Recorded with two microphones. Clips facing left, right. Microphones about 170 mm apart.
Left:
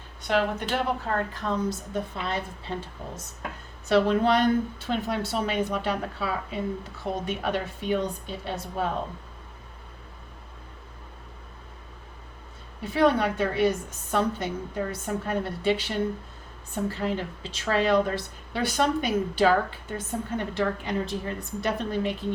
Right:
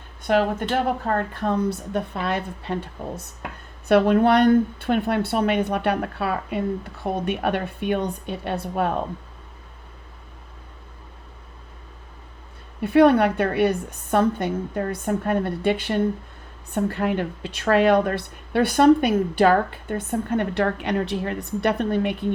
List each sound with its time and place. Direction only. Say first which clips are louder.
0.2 s a sound: right 5 dB; 50° right (ahead or behind)
0.7 s a woman's voice: right 5 dB; 50° right (ahead or behind)
12.8 s a woman's voice: right 7 dB; 60° right (ahead or behind)